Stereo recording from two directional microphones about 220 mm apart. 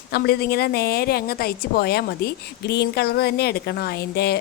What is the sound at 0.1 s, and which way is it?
A woman's voice, 45° left (ahead or behind).